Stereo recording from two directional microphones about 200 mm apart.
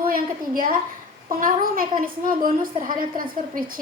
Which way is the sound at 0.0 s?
45° right (ahead or behind).